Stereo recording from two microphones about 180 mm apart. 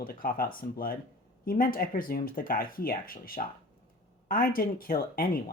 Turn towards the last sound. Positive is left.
turn(degrees=55)  # may be behind; listen again after turning